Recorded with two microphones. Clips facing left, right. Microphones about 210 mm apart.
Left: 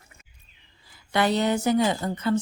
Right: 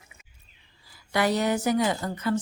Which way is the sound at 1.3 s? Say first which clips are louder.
Left 2 dB; 25° left (ahead or behind).